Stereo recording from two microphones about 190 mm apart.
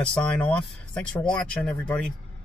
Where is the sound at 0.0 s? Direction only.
5° left (ahead or behind).